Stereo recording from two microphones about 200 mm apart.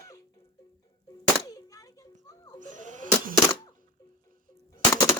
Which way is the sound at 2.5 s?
40° right (ahead or behind).